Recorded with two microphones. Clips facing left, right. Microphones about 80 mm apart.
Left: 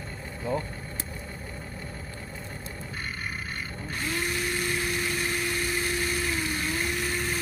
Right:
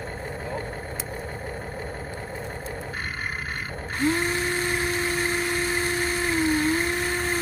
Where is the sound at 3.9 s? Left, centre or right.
Right.